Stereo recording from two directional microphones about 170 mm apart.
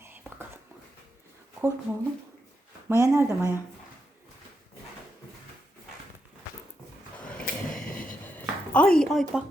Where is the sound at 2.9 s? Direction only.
15° right (ahead or behind).